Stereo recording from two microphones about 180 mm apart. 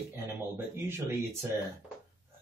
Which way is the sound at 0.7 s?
10° right (ahead or behind).